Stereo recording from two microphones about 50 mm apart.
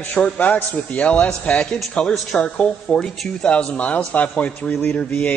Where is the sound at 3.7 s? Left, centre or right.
Left.